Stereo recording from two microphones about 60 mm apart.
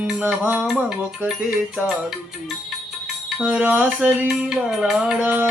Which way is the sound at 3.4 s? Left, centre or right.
Right.